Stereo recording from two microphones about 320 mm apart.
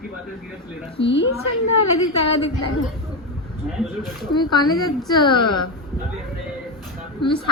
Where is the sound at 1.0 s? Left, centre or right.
Left.